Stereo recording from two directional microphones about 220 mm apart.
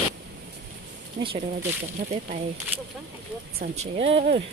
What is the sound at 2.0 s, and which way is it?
Speech, 40° right (ahead or behind).